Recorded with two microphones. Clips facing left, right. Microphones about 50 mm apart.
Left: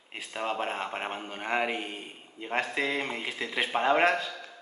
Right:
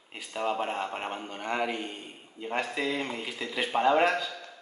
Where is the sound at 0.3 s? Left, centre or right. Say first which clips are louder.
Right 2 dB; left.